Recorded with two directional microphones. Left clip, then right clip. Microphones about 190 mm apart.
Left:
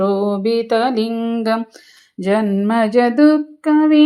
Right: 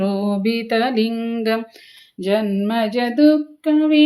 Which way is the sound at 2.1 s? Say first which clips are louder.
Left 2 dB; 20° left (ahead or behind).